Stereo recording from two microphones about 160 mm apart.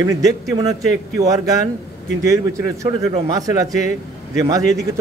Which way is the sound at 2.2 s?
20° right (ahead or behind).